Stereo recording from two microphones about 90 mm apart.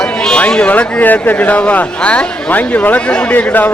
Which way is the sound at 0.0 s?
10° left (ahead or behind).